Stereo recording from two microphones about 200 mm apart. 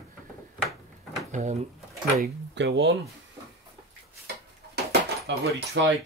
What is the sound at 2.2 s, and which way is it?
Speech, 60° right (ahead or behind).